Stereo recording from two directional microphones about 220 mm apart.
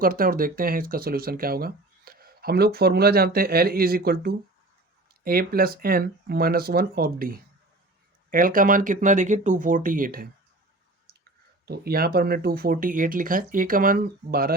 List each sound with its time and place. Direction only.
0.0 s speech: 40° right (ahead or behind)
11.6 s speech: 45° right (ahead or behind)